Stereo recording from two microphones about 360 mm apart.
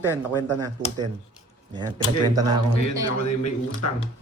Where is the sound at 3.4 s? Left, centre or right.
Left.